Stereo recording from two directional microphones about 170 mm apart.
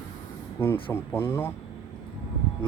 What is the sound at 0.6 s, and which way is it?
Speech, 15° left (ahead or behind).